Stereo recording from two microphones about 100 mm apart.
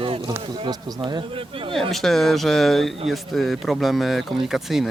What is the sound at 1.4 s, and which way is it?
Speech, 65° right (ahead or behind).